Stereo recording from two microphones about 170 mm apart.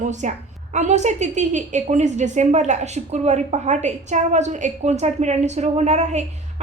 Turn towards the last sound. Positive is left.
turn(degrees=-40)  # may be behind; listen again after turning